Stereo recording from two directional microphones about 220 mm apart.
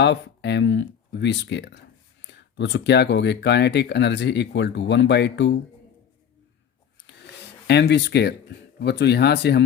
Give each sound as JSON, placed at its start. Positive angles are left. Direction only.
{"t": 0.0, "sound": "speech", "side_deg": 50}
{"t": 7.3, "sound": "speech", "side_deg": 50}